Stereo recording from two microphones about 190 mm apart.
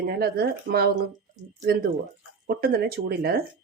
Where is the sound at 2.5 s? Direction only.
55° right (ahead or behind).